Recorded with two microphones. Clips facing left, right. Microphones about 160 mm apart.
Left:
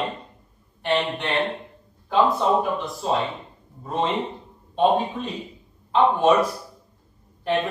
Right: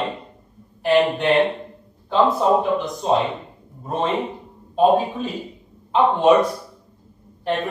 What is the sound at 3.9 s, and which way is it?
Speech, 55° right (ahead or behind).